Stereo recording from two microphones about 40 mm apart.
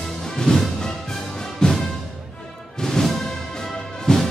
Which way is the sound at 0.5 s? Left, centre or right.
Centre.